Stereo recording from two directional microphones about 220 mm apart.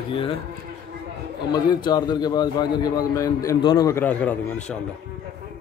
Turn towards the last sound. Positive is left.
turn(degrees=5)  # may be behind; listen again after turning